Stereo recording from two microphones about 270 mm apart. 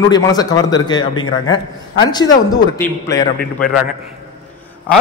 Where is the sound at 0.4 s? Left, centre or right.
Centre.